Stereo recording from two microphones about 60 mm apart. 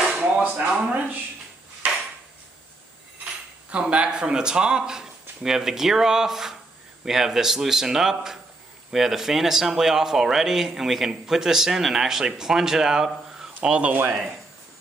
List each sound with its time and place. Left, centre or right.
0.1 s speech: centre
1.8 s a sound: right
3.7 s speech: centre
13.6 s speech: right